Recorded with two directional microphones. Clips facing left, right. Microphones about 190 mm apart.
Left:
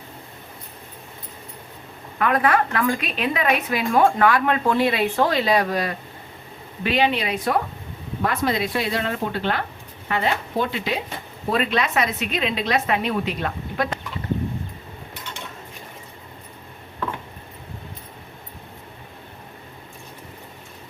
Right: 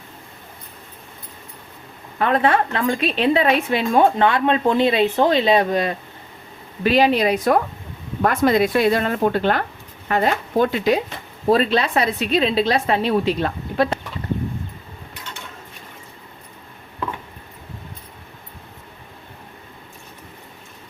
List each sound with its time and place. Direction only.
2.1 s a woman's voice: 30° right (ahead or behind)
6.8 s a woman's voice: 40° right (ahead or behind)
11.5 s a woman's voice: 35° right (ahead or behind)